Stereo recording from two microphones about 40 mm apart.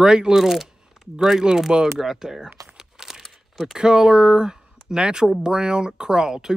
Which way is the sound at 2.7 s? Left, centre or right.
Centre.